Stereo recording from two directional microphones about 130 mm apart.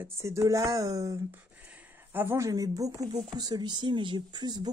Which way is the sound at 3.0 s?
55° right (ahead or behind).